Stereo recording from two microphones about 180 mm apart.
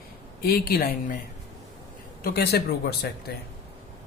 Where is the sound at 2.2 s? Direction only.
65° left (ahead or behind).